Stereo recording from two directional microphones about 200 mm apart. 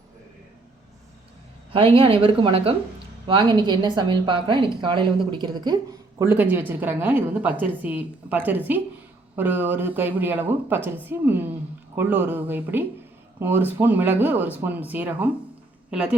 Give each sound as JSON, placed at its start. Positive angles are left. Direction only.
{"t": 1.7, "sound": "a woman's voice", "side_deg": -25}
{"t": 6.2, "sound": "a woman's voice", "side_deg": -10}